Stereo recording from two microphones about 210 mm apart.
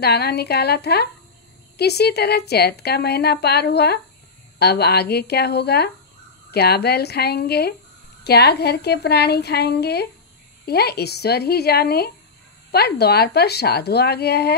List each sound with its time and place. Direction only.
0.0 s a woman's voice: 50° left (ahead or behind)